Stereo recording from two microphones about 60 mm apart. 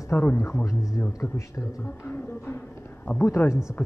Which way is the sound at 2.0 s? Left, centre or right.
Left.